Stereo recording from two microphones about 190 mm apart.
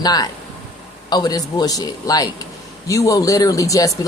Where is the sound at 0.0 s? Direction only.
20° left (ahead or behind).